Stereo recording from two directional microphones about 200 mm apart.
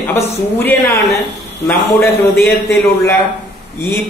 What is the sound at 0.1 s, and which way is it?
Speech, 10° left (ahead or behind).